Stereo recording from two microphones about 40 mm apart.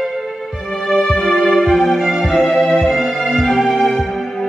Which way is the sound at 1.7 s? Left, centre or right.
Centre.